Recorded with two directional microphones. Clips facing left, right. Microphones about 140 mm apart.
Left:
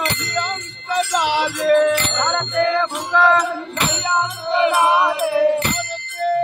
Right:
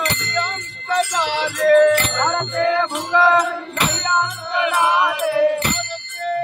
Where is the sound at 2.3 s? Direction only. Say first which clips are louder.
Left 1 dB; 5° right (ahead or behind).